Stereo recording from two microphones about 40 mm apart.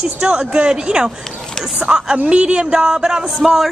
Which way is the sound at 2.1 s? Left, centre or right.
Right.